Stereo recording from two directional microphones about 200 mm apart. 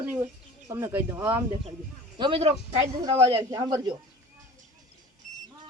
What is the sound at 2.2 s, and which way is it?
A man's voice, 25° right (ahead or behind).